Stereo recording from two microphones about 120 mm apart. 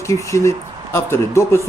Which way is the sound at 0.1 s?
25° left (ahead or behind).